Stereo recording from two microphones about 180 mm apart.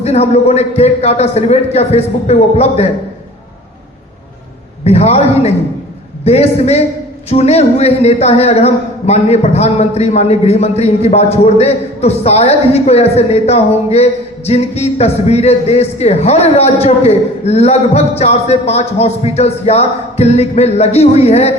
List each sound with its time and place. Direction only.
0.0 s a man's voice: 35° left (ahead or behind)
4.8 s a man's voice: 35° left (ahead or behind)